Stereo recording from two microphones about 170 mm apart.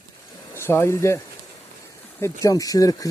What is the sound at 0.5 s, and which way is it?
Speech, 15° left (ahead or behind).